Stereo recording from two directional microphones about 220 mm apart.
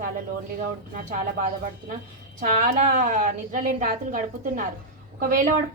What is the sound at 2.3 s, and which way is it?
A woman's voice, 35° right (ahead or behind).